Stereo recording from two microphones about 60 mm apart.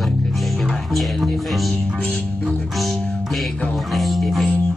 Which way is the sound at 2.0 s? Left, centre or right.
Centre.